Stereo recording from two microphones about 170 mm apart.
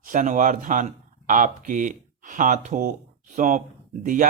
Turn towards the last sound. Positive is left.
turn(degrees=-50)  # may be behind; listen again after turning